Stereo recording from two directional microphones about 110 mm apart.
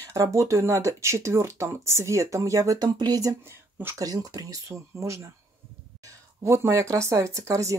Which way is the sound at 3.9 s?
30° right (ahead or behind).